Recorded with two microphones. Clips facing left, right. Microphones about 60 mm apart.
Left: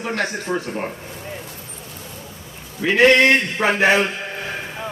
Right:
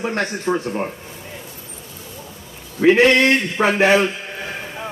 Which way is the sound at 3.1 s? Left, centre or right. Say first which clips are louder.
Left 1 dB; left.